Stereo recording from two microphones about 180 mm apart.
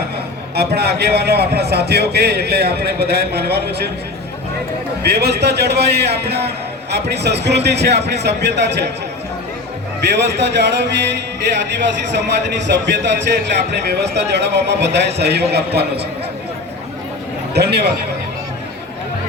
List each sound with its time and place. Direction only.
0.5 s a man's voice: 60° right (ahead or behind)
5.0 s a man's voice: 65° right (ahead or behind)
10.0 s speech: 70° right (ahead or behind)
12.6 s speech: 75° right (ahead or behind)
17.5 s a man's voice: 65° right (ahead or behind)